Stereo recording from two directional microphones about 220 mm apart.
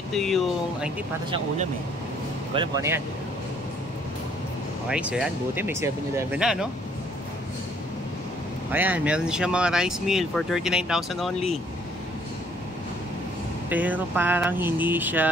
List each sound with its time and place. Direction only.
0.1 s speech: centre (ahead or behind)
2.5 s speech: 20° right (ahead or behind)
4.8 s speech: 5° right (ahead or behind)
8.7 s speech: 5° right (ahead or behind)
13.7 s speech: 5° right (ahead or behind)